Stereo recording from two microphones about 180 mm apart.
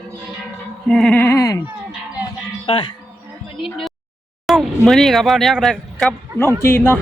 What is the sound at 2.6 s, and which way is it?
Speech, 25° left (ahead or behind).